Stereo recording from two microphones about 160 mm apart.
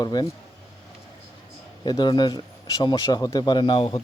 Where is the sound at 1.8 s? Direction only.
25° left (ahead or behind).